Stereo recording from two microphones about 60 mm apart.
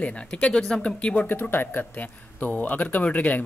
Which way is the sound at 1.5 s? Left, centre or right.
Left.